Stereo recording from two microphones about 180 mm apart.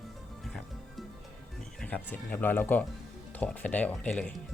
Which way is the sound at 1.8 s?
10° left (ahead or behind).